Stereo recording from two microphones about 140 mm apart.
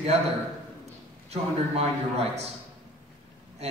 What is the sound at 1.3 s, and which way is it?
A man's voice, 50° right (ahead or behind).